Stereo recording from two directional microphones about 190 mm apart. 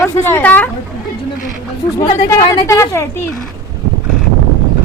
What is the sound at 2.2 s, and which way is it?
Speech, 15° left (ahead or behind).